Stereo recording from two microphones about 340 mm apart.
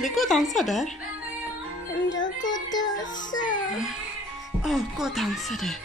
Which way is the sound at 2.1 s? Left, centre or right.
Left.